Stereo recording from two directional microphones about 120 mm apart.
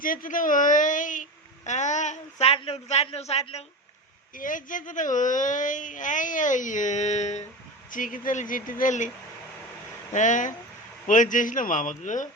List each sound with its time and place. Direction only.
0.3 s speech: 90° left
2.5 s speech: 55° left (ahead or behind)
4.4 s speech: 90° left; by 7.4 s 70° left (ahead or behind)
7.9 s speech: 90° left
10.1 s speech: 90° left